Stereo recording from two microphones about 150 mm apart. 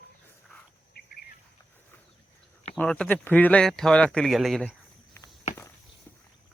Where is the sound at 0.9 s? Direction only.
90° left.